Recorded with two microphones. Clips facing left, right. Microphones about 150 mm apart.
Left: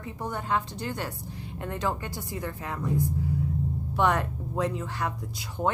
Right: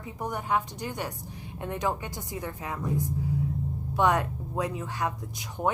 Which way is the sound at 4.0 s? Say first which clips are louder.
Right 1 dB; 15° right (ahead or behind).